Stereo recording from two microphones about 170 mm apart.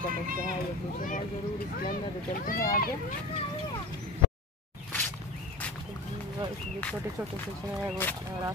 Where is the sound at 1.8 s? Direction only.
55° left (ahead or behind).